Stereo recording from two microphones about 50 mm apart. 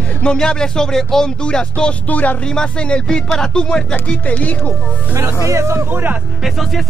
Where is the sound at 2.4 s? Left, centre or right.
Centre.